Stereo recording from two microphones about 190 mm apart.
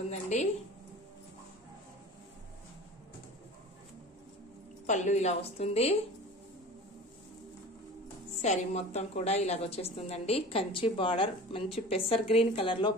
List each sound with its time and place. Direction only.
0.1 s a woman's voice: 35° left (ahead or behind)
4.8 s a woman's voice: 40° left (ahead or behind)
8.4 s a woman's voice: 35° left (ahead or behind)